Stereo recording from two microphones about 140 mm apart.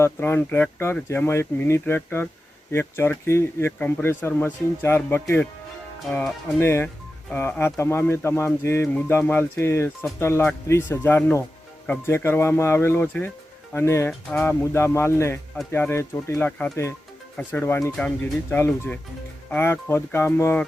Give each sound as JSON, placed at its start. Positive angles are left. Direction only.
{"t": 0.0, "sound": "speech", "side_deg": 15}
{"t": 14.1, "sound": "speech", "side_deg": 5}
{"t": 14.4, "sound": "speech", "side_deg": 20}
{"t": 16.5, "sound": "speech", "side_deg": 5}
{"t": 17.3, "sound": "speech", "side_deg": 15}